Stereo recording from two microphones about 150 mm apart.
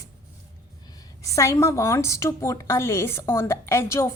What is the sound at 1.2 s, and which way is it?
A woman's voice, 20° left (ahead or behind).